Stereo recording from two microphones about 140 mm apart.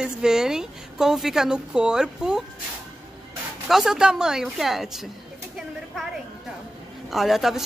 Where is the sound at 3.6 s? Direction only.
5° right (ahead or behind).